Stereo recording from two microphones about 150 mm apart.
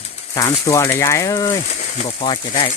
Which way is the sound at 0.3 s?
20° left (ahead or behind).